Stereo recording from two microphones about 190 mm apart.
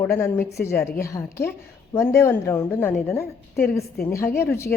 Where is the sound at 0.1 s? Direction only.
10° left (ahead or behind).